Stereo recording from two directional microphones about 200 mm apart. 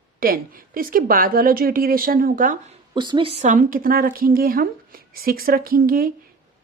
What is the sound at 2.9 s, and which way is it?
Speech, 25° right (ahead or behind).